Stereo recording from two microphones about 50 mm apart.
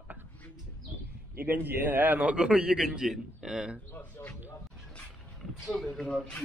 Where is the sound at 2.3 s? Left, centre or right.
Right.